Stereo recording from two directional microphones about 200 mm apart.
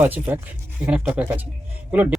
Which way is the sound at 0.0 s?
10° right (ahead or behind).